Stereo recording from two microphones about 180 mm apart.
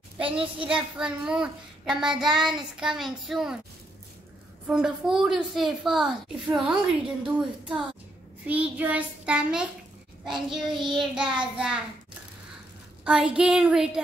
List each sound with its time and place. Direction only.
0.7 s a woman's voice: 5° right (ahead or behind)
4.6 s a woman's voice: 5° right (ahead or behind)
8.5 s child singing: 10° right (ahead or behind)
10.2 s a woman's voice: centre (ahead or behind)
10.7 s child singing: 25° right (ahead or behind)
11.0 s a woman's voice: 5° right (ahead or behind)
13.0 s a woman's voice: 5° right (ahead or behind)